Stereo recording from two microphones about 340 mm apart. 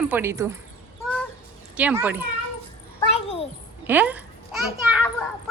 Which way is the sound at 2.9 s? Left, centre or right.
Centre.